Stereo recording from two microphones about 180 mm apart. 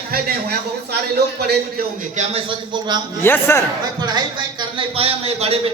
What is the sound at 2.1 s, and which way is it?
Speech, 30° right (ahead or behind).